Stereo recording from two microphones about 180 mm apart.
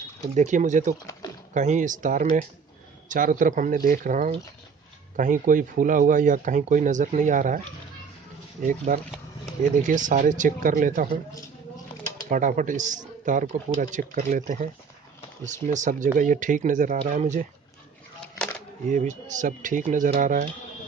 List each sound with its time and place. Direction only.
0.3 s speech: 40° right (ahead or behind)
8.6 s speech: 45° right (ahead or behind)
12.3 s speech: 45° right (ahead or behind)
18.9 s speech: 45° right (ahead or behind)